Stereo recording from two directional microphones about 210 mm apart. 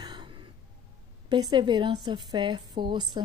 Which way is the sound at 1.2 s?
20° right (ahead or behind).